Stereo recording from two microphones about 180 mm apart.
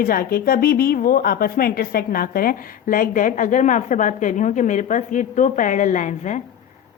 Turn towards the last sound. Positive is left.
turn(degrees=40)  # may be behind; listen again after turning